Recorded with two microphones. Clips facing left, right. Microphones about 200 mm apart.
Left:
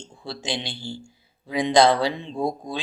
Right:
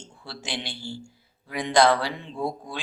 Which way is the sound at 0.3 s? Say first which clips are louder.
Left 4 dB; 20° left (ahead or behind).